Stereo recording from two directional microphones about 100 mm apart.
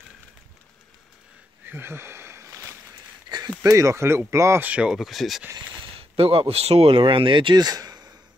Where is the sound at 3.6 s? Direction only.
35° right (ahead or behind).